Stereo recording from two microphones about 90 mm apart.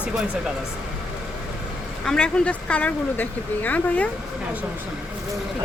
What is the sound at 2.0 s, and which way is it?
Speech, 10° left (ahead or behind).